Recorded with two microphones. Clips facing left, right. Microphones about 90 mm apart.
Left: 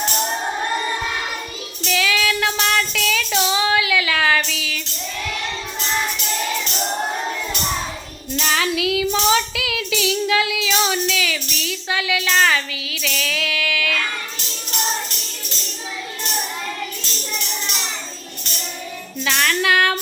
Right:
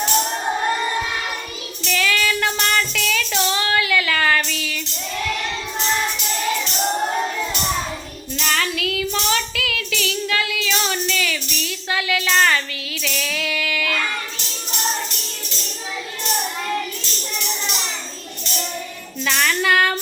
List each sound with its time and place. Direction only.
1.9 s child singing: 5° left (ahead or behind)
8.4 s music: 5° left (ahead or behind)
19.2 s a sound: centre (ahead or behind)